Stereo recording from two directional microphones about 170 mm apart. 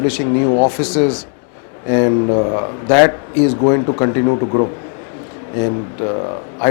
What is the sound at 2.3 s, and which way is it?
A man's voice, 30° left (ahead or behind).